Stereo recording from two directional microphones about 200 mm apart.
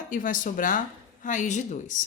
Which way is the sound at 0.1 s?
40° left (ahead or behind).